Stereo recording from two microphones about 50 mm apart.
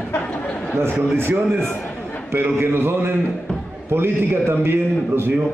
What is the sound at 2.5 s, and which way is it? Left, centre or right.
A man's voice, right.